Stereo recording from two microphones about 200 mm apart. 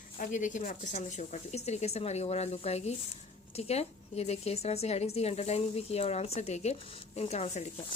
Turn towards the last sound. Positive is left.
turn(degrees=35)  # may be behind; listen again after turning